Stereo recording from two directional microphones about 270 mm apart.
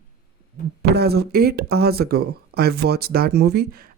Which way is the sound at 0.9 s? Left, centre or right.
Right.